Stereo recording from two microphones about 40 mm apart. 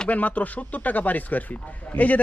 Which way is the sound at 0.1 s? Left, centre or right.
Left.